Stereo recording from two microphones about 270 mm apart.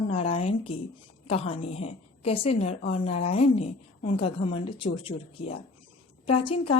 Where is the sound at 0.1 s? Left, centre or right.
Left.